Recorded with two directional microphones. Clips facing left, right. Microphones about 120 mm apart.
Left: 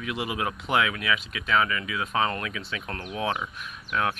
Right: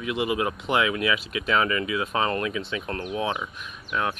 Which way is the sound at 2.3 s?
35° right (ahead or behind).